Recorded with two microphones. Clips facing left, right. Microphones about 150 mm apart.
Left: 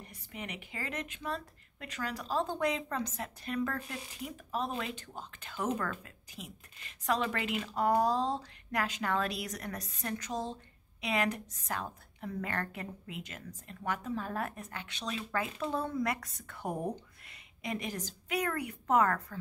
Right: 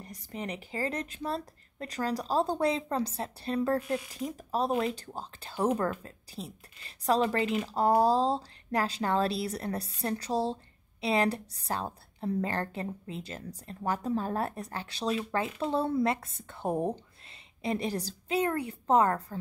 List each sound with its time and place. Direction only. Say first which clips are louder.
0.0 s speech: right 6 dB; 35° right (ahead or behind)